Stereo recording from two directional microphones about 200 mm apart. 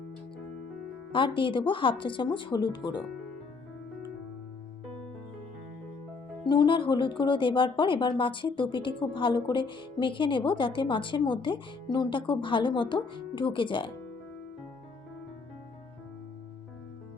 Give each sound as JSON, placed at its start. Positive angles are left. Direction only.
{"t": 1.1, "sound": "a woman's voice", "side_deg": 25}
{"t": 6.5, "sound": "a woman's voice", "side_deg": 25}